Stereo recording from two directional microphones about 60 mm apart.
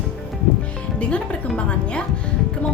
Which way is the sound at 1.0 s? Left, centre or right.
Left.